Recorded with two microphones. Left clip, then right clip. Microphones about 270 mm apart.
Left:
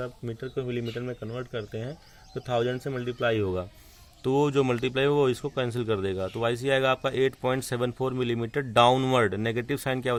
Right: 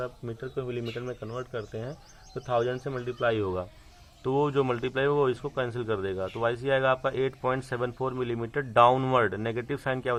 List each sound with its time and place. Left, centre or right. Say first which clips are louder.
0.0 s speech: even; left